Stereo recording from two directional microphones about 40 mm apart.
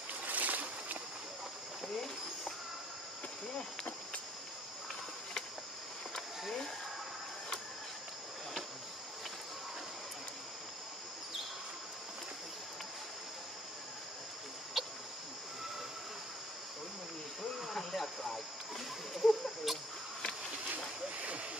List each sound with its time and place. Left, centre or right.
0.3 s boat: right
14.8 s cricket: centre
17.6 s a sound: centre